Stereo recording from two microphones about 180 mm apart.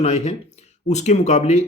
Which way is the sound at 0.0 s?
35° left (ahead or behind).